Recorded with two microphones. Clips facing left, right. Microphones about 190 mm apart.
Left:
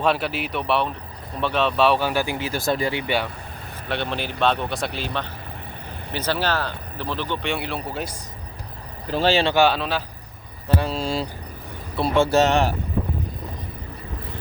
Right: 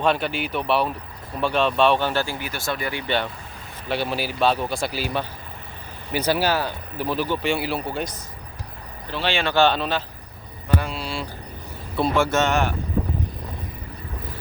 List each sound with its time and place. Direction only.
0.0 s speech: 5° left (ahead or behind); by 2.5 s 20° left (ahead or behind)
2.5 s speech: 35° left (ahead or behind)
3.8 s speech: 5° right (ahead or behind)
9.0 s speech: 40° left (ahead or behind)
9.6 s speech: 5° left (ahead or behind)
10.7 s speech: 35° left (ahead or behind)